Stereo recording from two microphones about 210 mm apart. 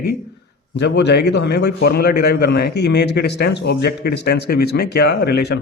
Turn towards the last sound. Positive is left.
turn(degrees=50)  # may be behind; listen again after turning